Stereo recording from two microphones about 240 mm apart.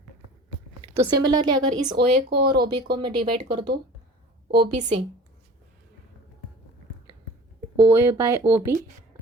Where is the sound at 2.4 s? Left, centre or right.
Right.